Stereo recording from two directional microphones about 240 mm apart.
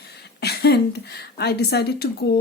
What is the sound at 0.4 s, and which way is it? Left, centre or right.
Speech, left.